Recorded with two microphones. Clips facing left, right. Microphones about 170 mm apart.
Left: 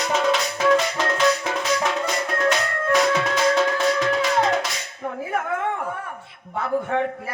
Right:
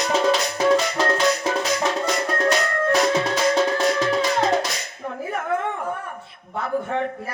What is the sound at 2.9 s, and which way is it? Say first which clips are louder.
Music: left 1 dB; 35° right (ahead or behind).